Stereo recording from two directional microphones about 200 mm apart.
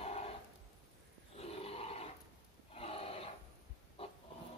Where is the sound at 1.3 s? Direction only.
30° left (ahead or behind).